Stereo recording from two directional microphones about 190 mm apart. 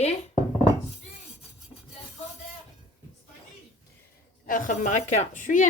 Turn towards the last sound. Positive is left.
turn(degrees=40)  # may be behind; listen again after turning